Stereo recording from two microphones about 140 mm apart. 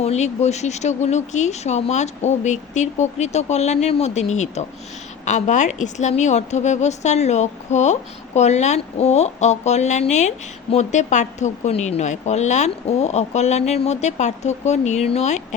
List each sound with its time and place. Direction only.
0.0 s a woman's voice: 50° left (ahead or behind)